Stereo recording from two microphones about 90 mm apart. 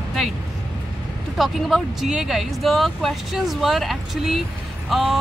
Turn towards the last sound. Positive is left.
turn(degrees=0)  # may be behind; listen again after turning